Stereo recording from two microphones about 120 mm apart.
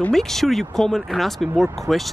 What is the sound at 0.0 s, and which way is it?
Speech, 5° left (ahead or behind).